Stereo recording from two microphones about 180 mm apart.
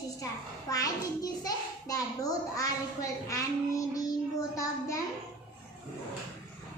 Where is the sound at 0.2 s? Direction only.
20° left (ahead or behind).